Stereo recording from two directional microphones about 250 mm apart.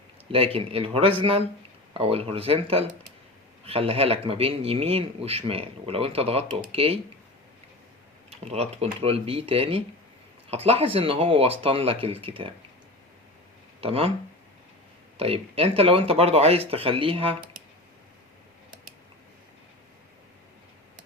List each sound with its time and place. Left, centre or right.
0.3 s speech: right
8.4 s speech: right
13.8 s speech: right
15.2 s speech: right